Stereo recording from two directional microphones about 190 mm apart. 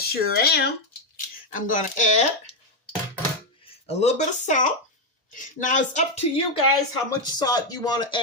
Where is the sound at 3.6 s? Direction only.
35° left (ahead or behind).